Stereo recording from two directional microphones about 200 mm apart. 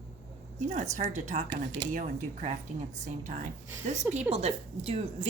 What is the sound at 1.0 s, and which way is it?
A woman's voice, 35° right (ahead or behind).